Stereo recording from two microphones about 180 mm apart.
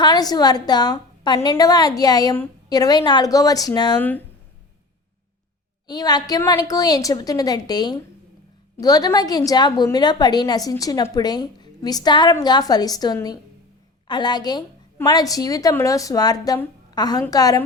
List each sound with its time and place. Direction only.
0.0 s a woman's voice: 20° left (ahead or behind)
5.9 s a woman's voice: 20° left (ahead or behind)